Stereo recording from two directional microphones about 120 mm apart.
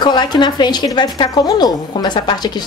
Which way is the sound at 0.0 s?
35° left (ahead or behind).